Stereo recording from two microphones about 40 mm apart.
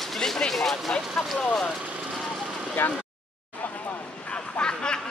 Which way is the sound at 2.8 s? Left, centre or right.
Left.